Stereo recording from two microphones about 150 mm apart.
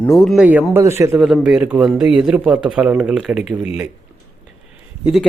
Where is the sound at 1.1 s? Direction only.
5° right (ahead or behind).